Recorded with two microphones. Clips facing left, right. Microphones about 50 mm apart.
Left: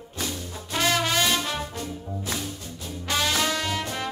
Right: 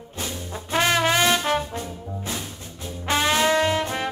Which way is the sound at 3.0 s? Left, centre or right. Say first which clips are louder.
Right 5 dB; right.